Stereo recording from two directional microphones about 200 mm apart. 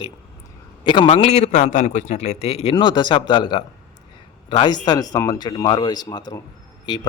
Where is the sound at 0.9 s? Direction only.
25° left (ahead or behind).